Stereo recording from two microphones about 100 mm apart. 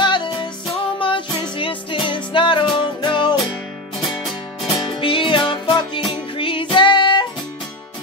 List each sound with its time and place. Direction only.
0.0 s music: 50° left (ahead or behind)
4.8 s music: 55° left (ahead or behind)